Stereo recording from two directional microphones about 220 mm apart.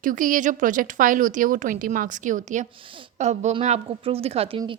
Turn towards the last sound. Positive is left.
turn(degrees=-25)  # may be behind; listen again after turning